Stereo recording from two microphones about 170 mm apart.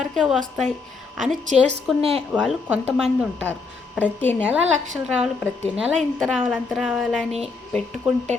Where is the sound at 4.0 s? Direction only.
10° left (ahead or behind).